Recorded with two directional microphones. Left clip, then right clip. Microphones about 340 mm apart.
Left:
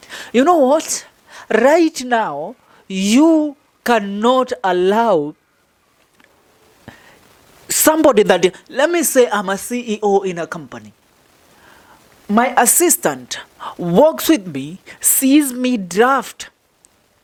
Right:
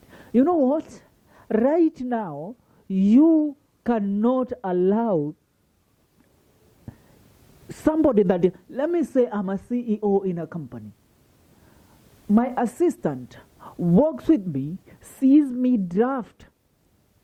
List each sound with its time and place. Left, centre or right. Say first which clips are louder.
0.0 s a woman's voice: left 7 dB; centre
2.4 s a sound: left 10 dB; centre
2.8 s a woman's voice: left 5 dB; centre
7.7 s a woman's voice: left 9 dB; centre
12.3 s a woman's voice: left 10 dB; centre